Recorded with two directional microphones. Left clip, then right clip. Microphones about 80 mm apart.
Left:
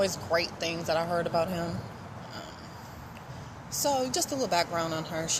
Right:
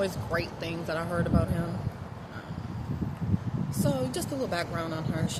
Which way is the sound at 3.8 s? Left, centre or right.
Right.